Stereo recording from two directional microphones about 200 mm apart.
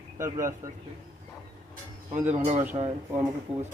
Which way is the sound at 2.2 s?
35° right (ahead or behind).